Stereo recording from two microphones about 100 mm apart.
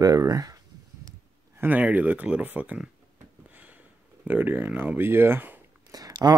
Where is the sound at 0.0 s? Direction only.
35° right (ahead or behind).